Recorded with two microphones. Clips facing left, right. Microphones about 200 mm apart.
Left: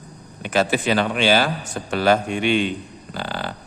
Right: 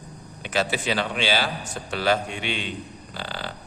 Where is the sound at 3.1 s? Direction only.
50° left (ahead or behind).